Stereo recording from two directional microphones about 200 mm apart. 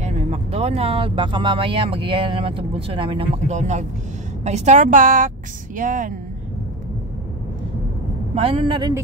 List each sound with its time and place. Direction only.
0.0 s a woman's voice: 30° right (ahead or behind)
8.4 s speech: 30° right (ahead or behind)